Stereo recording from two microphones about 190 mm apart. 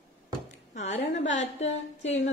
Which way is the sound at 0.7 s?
35° left (ahead or behind).